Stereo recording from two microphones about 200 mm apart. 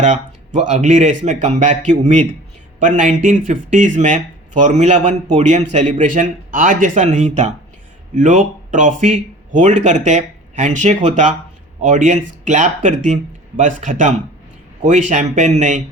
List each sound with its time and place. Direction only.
0.0 s a man's voice: 35° right (ahead or behind)